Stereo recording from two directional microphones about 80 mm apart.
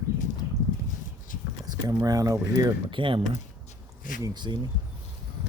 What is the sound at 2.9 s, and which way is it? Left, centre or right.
Speech, right.